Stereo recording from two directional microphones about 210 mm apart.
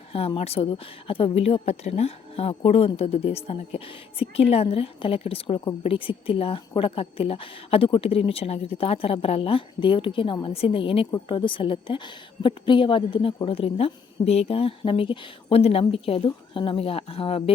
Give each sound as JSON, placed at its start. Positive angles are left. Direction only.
{"t": 0.1, "sound": "speech", "side_deg": 30}